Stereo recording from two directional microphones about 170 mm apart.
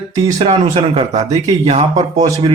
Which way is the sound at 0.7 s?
35° right (ahead or behind).